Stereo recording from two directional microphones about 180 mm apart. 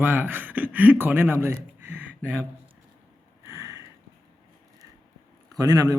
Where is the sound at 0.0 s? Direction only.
10° right (ahead or behind).